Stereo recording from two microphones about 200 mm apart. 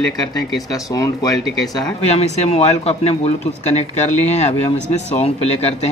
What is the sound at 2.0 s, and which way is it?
Speech, 30° left (ahead or behind).